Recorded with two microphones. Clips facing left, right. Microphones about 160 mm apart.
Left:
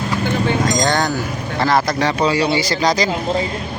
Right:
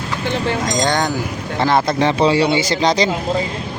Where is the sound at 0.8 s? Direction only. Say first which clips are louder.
Even; 20° right (ahead or behind).